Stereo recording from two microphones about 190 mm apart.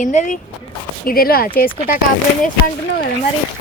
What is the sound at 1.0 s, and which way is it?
Speech, 50° left (ahead or behind).